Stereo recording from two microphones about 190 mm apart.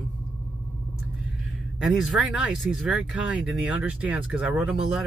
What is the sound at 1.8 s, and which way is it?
Speech, centre (ahead or behind).